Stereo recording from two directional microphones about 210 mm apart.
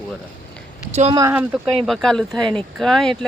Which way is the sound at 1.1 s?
15° right (ahead or behind).